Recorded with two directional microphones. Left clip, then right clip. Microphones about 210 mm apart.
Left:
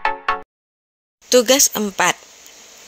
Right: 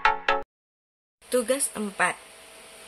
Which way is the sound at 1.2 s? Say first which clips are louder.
Left 12 dB; 35° left (ahead or behind).